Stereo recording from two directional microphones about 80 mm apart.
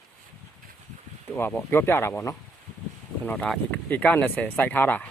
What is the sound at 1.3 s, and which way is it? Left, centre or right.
Speech, left.